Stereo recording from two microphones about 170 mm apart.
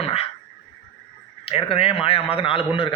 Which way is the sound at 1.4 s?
35° left (ahead or behind).